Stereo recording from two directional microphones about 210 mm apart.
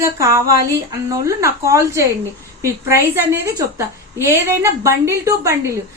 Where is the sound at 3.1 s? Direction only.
10° right (ahead or behind).